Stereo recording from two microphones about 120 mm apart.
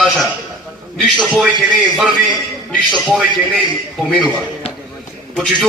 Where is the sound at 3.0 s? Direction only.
Centre (ahead or behind).